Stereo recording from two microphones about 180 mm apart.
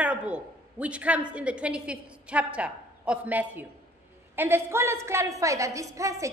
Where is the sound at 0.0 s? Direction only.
5° right (ahead or behind).